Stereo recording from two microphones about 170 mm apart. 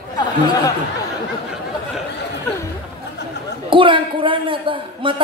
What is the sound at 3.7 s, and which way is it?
A man's voice, 30° right (ahead or behind).